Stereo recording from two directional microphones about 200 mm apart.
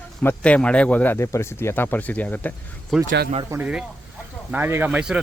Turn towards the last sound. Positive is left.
turn(degrees=-5)  # may be behind; listen again after turning